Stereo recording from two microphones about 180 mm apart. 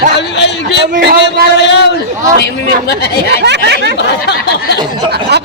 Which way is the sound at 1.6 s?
75° left (ahead or behind).